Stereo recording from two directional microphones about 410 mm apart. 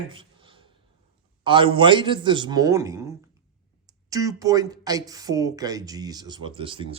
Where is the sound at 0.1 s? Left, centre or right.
Centre.